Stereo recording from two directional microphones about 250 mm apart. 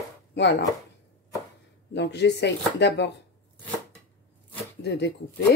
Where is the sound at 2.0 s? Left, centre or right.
Left.